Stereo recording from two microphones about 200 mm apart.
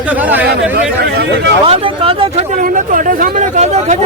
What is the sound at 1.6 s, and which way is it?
A man's voice, 30° right (ahead or behind).